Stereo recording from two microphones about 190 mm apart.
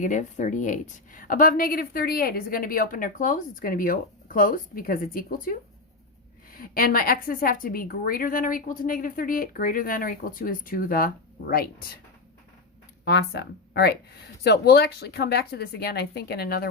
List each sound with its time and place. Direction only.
0.0 s a woman's voice: 40° left (ahead or behind)
13.1 s speech: 60° left (ahead or behind)